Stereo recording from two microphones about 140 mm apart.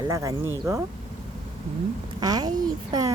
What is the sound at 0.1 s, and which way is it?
Speech, 20° right (ahead or behind).